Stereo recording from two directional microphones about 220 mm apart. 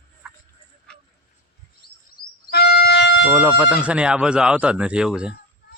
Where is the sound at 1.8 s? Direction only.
45° left (ahead or behind).